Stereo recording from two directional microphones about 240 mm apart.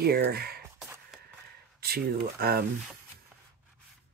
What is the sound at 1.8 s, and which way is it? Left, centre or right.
Speech, right.